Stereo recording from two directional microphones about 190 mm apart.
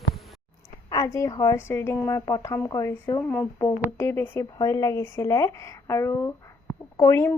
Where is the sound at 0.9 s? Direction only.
15° left (ahead or behind).